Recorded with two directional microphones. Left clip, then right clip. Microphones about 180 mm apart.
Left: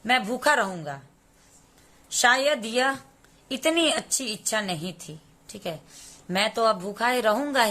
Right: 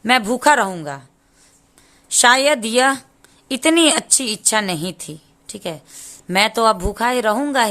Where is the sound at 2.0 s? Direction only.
45° right (ahead or behind).